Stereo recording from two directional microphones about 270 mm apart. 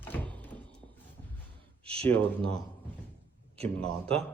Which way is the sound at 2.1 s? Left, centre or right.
Centre.